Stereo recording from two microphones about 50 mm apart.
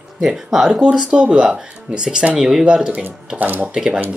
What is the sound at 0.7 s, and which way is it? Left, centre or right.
Speech, right.